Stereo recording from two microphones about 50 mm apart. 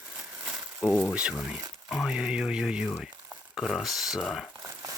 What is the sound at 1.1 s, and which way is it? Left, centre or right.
Speech, centre.